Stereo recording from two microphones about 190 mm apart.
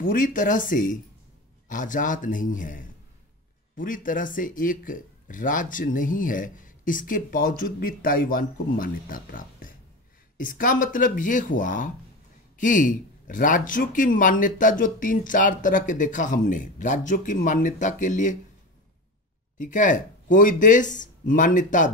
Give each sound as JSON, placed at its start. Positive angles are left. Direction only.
{"t": 0.0, "sound": "speech", "side_deg": 45}
{"t": 19.6, "sound": "speech", "side_deg": 40}